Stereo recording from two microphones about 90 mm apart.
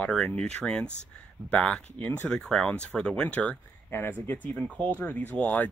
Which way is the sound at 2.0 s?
20° left (ahead or behind).